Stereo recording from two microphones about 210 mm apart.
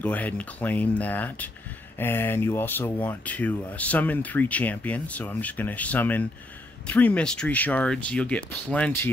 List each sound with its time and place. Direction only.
0.0 s speech: 5° left (ahead or behind)